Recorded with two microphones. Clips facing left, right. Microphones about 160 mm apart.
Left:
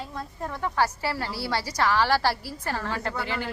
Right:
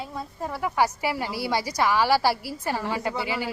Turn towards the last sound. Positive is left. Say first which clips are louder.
# right 2 dB
turn(degrees=-10)  # may be behind; listen again after turning